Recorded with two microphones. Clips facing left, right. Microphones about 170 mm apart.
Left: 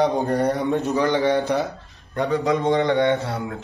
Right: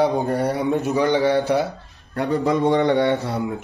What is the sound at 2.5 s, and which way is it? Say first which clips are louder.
Speech: right 2 dB; 20° left (ahead or behind).